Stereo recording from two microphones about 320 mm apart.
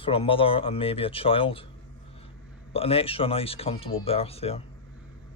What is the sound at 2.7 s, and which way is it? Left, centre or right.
Speech, centre.